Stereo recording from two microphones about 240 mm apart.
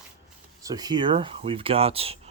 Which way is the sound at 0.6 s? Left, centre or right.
Centre.